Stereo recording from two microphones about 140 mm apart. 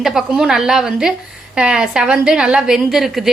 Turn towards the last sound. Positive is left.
turn(degrees=0)  # may be behind; listen again after turning